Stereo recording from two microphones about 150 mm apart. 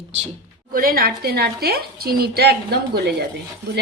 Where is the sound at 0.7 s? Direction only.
80° right.